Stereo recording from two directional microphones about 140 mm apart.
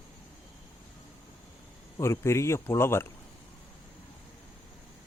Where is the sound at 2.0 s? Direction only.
20° left (ahead or behind).